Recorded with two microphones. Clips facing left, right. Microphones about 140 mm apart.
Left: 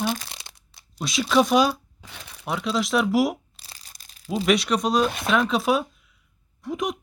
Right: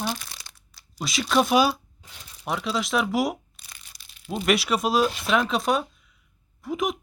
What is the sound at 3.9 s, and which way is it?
Tearing, 40° left (ahead or behind).